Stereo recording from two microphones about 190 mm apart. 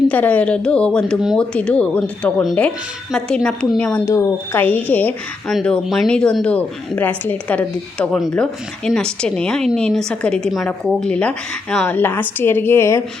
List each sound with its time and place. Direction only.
0.1 s speech: 5° left (ahead or behind)